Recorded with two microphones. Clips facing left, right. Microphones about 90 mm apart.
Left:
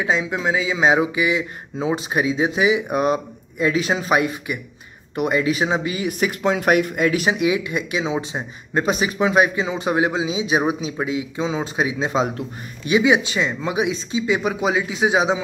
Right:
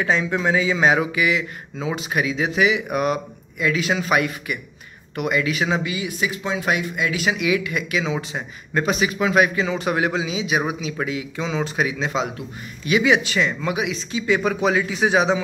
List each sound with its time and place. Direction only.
0.0 s speech: 10° left (ahead or behind)
0.8 s speech: 20° left (ahead or behind)
5.9 s speech: 50° left (ahead or behind)
12.9 s speech: 20° left (ahead or behind)
14.2 s speech: 15° left (ahead or behind)